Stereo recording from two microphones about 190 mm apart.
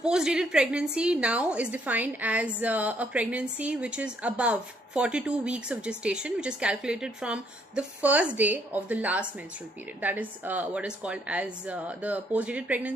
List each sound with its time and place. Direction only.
0.0 s a woman's voice: 5° right (ahead or behind)